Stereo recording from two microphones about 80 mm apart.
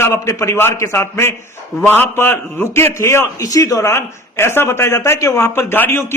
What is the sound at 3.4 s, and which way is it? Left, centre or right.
Speech, left.